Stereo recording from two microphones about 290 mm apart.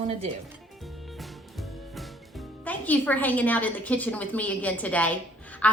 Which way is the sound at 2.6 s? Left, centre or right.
Centre.